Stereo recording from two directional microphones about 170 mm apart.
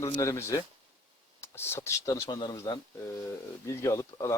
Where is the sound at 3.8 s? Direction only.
20° left (ahead or behind).